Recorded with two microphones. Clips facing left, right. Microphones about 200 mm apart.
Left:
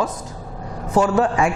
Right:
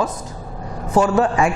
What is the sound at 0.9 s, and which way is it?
Speech, 25° right (ahead or behind).